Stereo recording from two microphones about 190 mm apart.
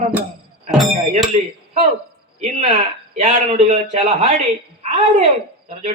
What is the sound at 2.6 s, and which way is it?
A man's voice, 35° right (ahead or behind).